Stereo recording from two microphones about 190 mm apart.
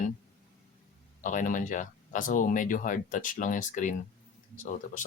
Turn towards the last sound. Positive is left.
turn(degrees=40)  # may be behind; listen again after turning